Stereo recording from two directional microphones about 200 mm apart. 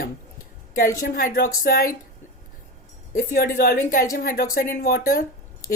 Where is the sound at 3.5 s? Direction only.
45° left (ahead or behind).